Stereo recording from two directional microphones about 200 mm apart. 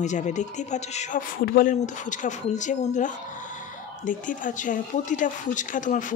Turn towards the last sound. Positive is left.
turn(degrees=40)  # may be behind; listen again after turning